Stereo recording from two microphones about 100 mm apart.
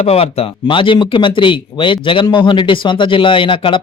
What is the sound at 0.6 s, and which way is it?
Speech, 55° left (ahead or behind).